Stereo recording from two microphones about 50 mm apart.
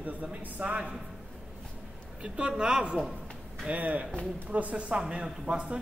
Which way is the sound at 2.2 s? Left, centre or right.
Centre.